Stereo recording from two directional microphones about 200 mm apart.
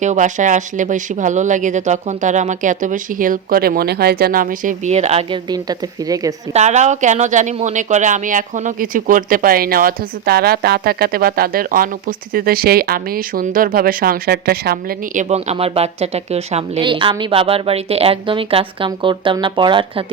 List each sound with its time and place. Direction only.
0.0 s speech: 40° right (ahead or behind); by 6.3 s 20° right (ahead or behind)
6.5 s speech: 35° right (ahead or behind)